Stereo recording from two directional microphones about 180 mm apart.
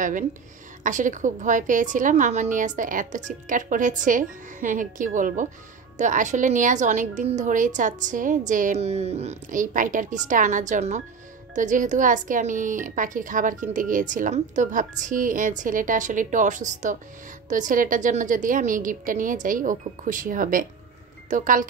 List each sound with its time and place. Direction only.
0.8 s a woman's voice: 45° right (ahead or behind)